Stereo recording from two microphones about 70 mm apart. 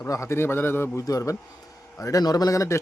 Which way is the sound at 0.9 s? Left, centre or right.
Left.